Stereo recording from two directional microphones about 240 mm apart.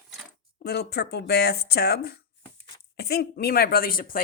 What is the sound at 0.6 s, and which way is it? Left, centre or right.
Speech, left.